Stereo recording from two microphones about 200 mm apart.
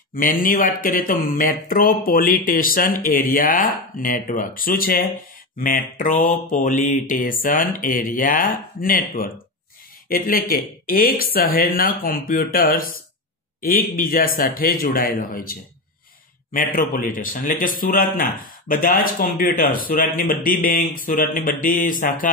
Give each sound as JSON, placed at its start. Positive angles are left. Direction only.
{"t": 0.1, "sound": "speech", "side_deg": 45}
{"t": 16.5, "sound": "speech", "side_deg": 45}